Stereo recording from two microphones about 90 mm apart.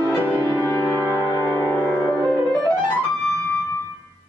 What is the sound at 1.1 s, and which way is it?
Music, 40° right (ahead or behind).